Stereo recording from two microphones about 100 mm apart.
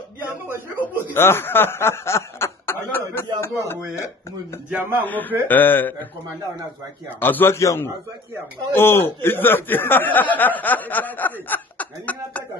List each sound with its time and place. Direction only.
0.5 s a man's voice: 20° right (ahead or behind)
1.1 s snicker: 25° left (ahead or behind)
3.3 s a man's voice: 25° left (ahead or behind)
7.2 s speech: 20° left (ahead or behind)